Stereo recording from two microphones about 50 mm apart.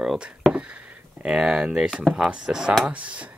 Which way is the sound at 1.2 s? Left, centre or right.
Centre.